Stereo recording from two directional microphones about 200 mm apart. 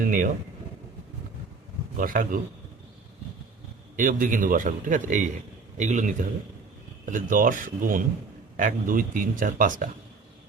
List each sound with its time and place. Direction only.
0.0 s speech: 45° right (ahead or behind)
2.0 s speech: 45° right (ahead or behind)
3.9 s speech: 40° right (ahead or behind)